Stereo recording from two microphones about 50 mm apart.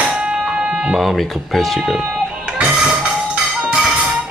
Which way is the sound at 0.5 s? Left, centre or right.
Centre.